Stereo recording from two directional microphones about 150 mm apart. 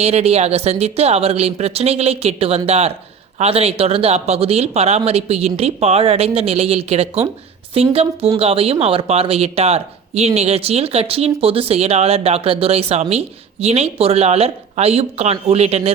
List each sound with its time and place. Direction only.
0.0 s a woman's voice: 45° right (ahead or behind)